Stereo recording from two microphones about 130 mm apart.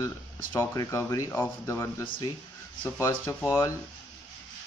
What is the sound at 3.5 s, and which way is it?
Speech, 25° left (ahead or behind).